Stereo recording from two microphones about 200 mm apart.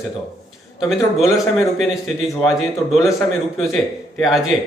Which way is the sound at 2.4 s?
Centre (ahead or behind).